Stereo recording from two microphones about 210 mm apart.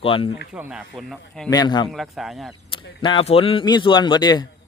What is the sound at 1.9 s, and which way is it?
Speech, centre (ahead or behind).